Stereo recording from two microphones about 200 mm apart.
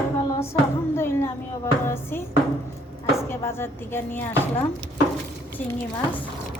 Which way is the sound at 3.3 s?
10° left (ahead or behind).